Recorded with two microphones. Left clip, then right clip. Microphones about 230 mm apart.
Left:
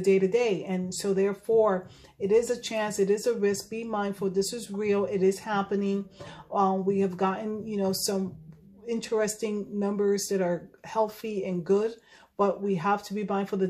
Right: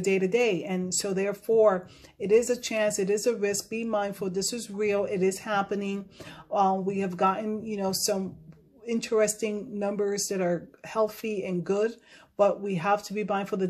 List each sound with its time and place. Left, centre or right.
0.0 s speech: right